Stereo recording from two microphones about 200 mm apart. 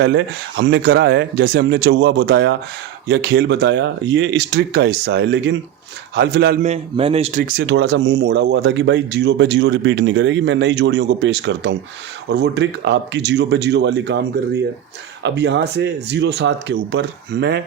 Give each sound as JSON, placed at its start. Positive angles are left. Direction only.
{"t": 0.0, "sound": "speech", "side_deg": -65}
{"t": 6.6, "sound": "speech", "side_deg": -30}